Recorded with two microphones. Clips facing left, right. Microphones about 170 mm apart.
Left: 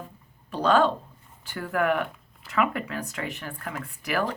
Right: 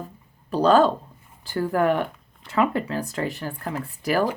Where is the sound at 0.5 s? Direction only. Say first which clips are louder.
Right 4 dB; 40° right (ahead or behind).